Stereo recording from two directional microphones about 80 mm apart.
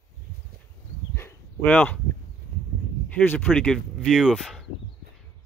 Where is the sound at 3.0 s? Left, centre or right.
Centre.